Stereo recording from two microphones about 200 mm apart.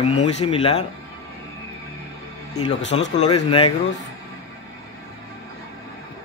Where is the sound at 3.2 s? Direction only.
25° left (ahead or behind).